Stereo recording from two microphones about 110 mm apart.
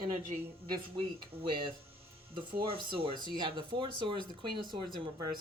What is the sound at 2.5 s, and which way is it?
Speech, 50° right (ahead or behind).